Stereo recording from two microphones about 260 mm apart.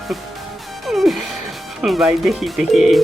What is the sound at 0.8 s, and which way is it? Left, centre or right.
Music, centre.